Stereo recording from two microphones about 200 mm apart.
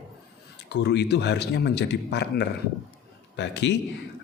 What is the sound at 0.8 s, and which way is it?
A man's voice, 55° left (ahead or behind).